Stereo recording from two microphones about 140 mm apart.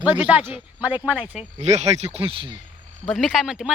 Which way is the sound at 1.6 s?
50° right (ahead or behind).